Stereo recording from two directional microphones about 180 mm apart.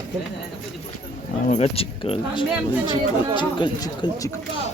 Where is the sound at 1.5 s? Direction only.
35° left (ahead or behind).